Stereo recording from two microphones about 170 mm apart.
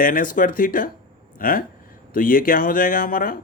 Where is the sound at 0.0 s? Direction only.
55° left (ahead or behind).